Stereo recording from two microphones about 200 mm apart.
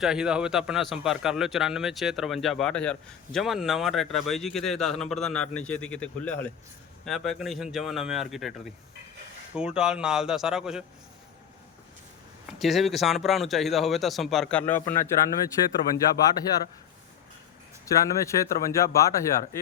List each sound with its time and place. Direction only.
0.0 s a man's voice: 5° right (ahead or behind)
12.5 s a man's voice: centre (ahead or behind)
16.2 s speech: 20° left (ahead or behind)
17.8 s speech: 15° left (ahead or behind)